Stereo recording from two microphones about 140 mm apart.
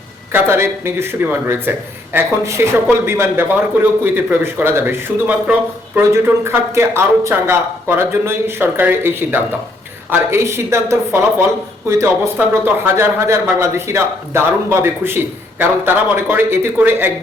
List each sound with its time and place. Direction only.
0.3 s speech: 15° right (ahead or behind)